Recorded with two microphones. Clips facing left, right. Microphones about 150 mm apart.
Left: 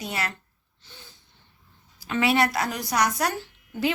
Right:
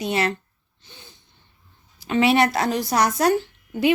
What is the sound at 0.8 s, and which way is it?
Snort, 20° right (ahead or behind).